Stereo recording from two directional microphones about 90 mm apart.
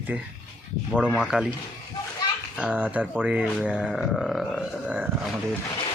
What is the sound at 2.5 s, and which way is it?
Speech, 15° right (ahead or behind).